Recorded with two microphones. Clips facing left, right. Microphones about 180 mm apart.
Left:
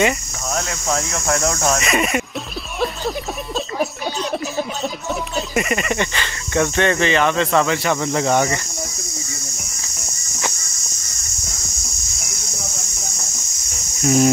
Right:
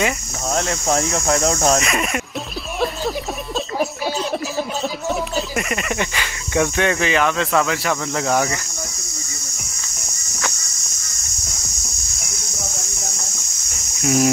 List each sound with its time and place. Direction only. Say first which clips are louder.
0.5 s speech: right 3 dB; 25° right (ahead or behind)
1.8 s cricket: left 2 dB; centre (ahead or behind)
5.3 s cricket: left 2 dB; centre (ahead or behind)
14.0 s cricket: left 2 dB; 5° right (ahead or behind)